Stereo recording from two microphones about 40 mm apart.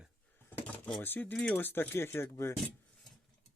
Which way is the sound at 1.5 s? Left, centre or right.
Left.